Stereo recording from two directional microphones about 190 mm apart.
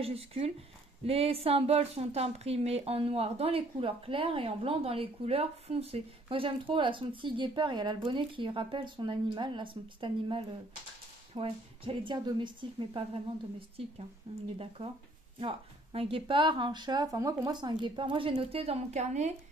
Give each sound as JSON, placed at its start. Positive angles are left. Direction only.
{"t": 0.0, "sound": "a woman's voice", "side_deg": -30}